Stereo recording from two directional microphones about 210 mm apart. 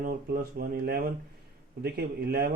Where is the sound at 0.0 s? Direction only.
45° right (ahead or behind).